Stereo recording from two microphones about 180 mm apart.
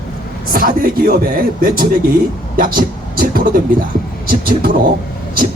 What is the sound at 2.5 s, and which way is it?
Speech, 50° right (ahead or behind).